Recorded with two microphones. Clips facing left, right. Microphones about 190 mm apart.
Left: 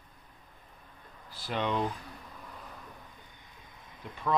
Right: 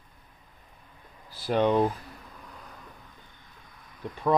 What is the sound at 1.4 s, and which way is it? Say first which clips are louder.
Speech: right 8 dB; 45° right (ahead or behind).